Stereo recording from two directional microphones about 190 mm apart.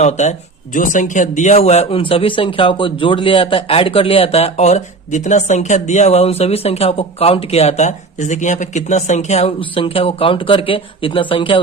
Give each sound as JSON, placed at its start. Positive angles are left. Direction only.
{"t": 0.0, "sound": "speech", "side_deg": 40}